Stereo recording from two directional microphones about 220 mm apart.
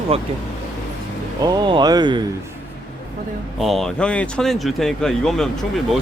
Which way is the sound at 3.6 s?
Centre (ahead or behind).